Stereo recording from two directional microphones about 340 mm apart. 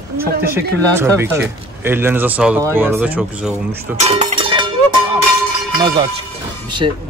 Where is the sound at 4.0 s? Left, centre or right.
Centre.